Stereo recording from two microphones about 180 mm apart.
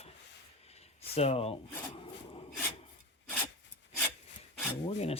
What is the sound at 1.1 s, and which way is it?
Speech, 35° left (ahead or behind).